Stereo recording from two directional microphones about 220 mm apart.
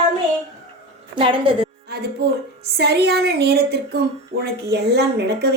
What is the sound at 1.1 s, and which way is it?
Speech, 25° right (ahead or behind).